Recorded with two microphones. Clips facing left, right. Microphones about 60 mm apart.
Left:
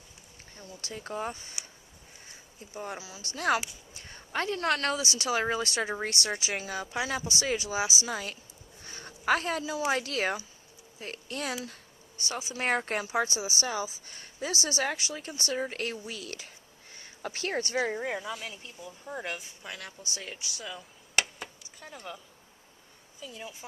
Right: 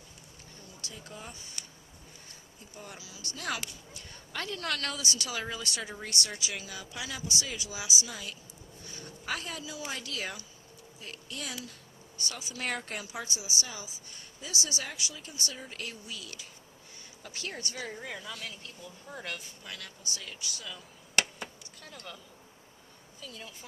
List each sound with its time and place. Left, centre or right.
0.5 s speech: left
2.7 s speech: left
8.8 s a sound: left
9.8 s speech: left
12.1 s speech: left
21.2 s a sound: centre
21.8 s speech: centre
23.2 s speech: centre